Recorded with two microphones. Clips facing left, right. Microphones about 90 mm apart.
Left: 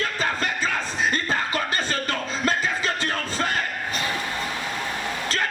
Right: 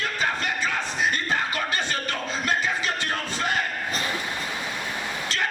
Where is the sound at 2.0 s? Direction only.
35° left (ahead or behind).